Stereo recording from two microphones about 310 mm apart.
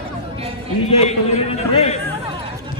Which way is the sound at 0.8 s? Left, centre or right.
Centre.